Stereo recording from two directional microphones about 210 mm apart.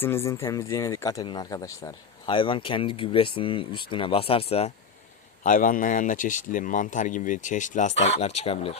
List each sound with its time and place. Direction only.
0.0 s speech: 10° left (ahead or behind); by 4.7 s 30° left (ahead or behind)
5.4 s speech: 40° left (ahead or behind)